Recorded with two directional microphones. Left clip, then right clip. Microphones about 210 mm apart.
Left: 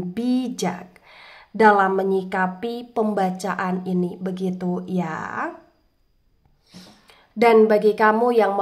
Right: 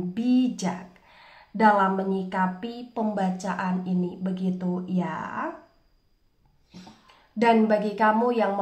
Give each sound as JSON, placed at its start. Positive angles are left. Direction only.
{"t": 0.1, "sound": "speech", "side_deg": 40}
{"t": 7.3, "sound": "speech", "side_deg": 35}